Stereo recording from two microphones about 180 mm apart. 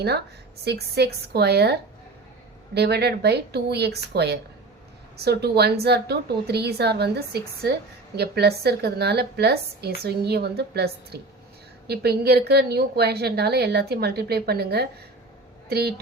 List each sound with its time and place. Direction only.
0.6 s a woman's voice: 65° right (ahead or behind)